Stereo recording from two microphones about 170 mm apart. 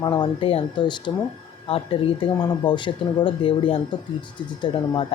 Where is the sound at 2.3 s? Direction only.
15° left (ahead or behind).